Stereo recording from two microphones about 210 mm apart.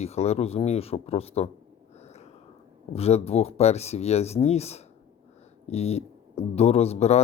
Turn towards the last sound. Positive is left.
turn(degrees=30)  # may be behind; listen again after turning